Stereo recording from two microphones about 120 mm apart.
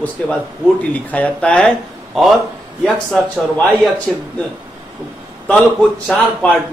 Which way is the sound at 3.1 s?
5° left (ahead or behind).